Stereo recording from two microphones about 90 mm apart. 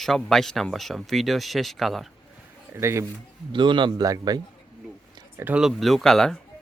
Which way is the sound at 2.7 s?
30° right (ahead or behind).